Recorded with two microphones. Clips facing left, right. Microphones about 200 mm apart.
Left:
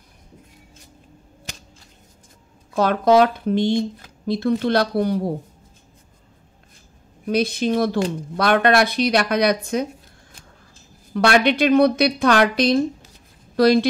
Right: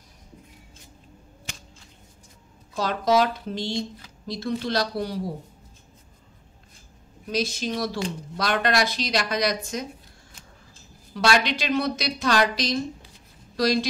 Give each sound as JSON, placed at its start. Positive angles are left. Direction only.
{"t": 2.7, "sound": "speech", "side_deg": 60}
{"t": 7.2, "sound": "speech", "side_deg": 60}
{"t": 11.1, "sound": "speech", "side_deg": 60}